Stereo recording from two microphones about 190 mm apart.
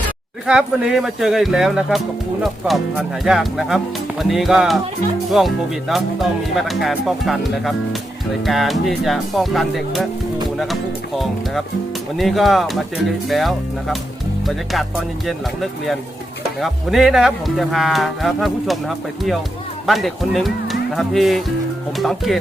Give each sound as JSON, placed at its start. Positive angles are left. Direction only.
{"t": 0.4, "sound": "speech", "side_deg": -5}
{"t": 12.1, "sound": "speech", "side_deg": 0}
{"t": 16.6, "sound": "speech", "side_deg": 0}